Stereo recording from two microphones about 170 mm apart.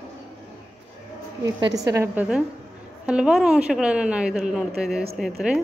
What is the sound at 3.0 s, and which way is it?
A woman's voice, 5° right (ahead or behind).